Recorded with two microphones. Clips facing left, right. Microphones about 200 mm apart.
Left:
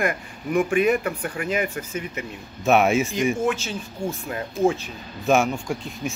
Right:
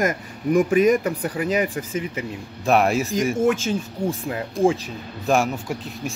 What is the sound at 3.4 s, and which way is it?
Speech, 50° right (ahead or behind).